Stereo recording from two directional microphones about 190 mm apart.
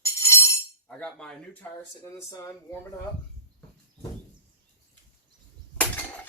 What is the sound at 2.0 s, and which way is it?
Speech, 15° left (ahead or behind).